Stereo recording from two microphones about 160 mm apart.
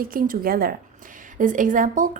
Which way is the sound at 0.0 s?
60° right (ahead or behind).